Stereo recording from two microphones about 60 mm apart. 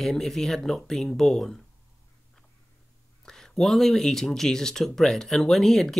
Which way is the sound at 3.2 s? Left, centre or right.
Centre.